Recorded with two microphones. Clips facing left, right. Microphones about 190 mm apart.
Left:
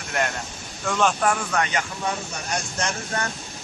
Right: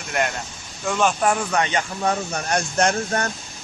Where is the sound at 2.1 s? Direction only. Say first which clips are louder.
Right 5 dB; 55° right (ahead or behind).